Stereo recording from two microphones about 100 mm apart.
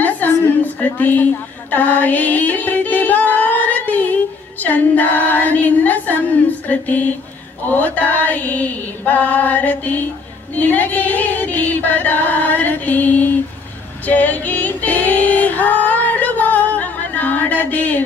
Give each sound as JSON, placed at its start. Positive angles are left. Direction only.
{"t": 0.9, "sound": "music", "side_deg": 15}
{"t": 14.0, "sound": "female singing", "side_deg": 15}